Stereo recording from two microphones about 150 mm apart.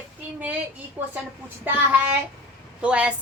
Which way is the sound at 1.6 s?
15° right (ahead or behind).